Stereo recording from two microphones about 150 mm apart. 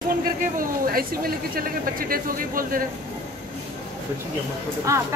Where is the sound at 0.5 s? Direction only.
75° right (ahead or behind).